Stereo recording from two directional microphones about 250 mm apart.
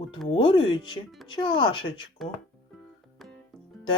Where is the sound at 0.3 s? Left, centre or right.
Centre.